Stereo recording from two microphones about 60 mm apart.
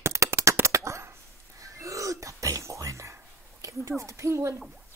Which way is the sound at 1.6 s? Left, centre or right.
Right.